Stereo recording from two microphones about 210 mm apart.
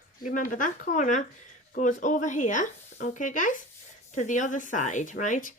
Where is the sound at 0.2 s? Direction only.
40° left (ahead or behind).